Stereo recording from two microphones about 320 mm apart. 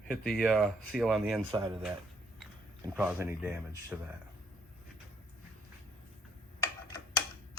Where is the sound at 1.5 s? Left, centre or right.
Centre.